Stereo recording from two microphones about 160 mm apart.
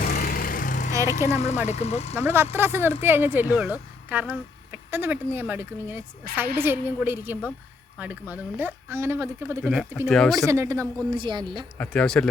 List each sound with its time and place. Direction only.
0.0 s vehicle: 70° left (ahead or behind); by 0.9 s 50° left (ahead or behind)
1.2 s speech: 15° right (ahead or behind)
1.6 s speech: 40° left (ahead or behind)
2.1 s speech: 15° right (ahead or behind)
10.4 s a woman's voice: 20° right (ahead or behind)
11.1 s a woman's voice: 30° right (ahead or behind)
11.8 s speech: 5° left (ahead or behind)